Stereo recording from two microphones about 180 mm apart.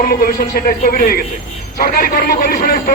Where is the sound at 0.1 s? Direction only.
60° left (ahead or behind).